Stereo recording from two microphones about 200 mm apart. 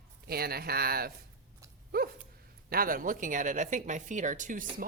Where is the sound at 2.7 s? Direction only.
45° right (ahead or behind).